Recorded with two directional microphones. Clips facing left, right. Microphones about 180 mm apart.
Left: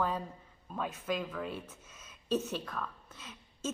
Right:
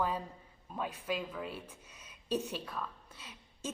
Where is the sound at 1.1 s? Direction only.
10° right (ahead or behind).